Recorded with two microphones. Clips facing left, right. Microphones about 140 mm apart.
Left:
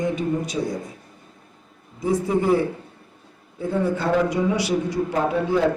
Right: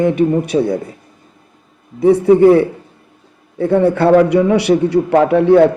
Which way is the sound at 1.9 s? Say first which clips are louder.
Right 12 dB; 65° right (ahead or behind).